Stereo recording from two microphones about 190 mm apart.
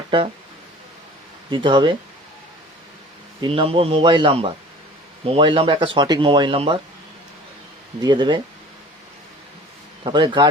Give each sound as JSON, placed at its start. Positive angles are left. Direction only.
{"t": 1.5, "sound": "speech", "side_deg": -25}
{"t": 3.4, "sound": "speech", "side_deg": -30}
{"t": 8.0, "sound": "speech", "side_deg": -25}
{"t": 10.0, "sound": "speech", "side_deg": -25}